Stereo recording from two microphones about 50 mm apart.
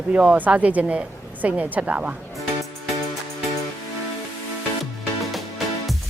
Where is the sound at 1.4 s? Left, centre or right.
Right.